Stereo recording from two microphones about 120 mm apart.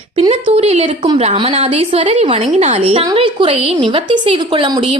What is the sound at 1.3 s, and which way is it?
Speech, 45° right (ahead or behind).